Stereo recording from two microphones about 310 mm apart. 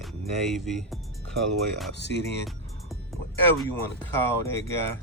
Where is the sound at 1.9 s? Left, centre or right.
Left.